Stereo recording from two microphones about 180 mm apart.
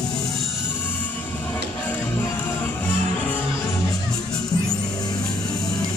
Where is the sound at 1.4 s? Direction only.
10° left (ahead or behind).